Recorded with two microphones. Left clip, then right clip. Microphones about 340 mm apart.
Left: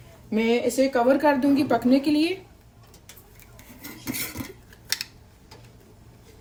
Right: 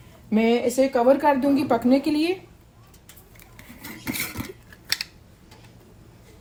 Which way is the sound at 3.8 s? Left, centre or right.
Right.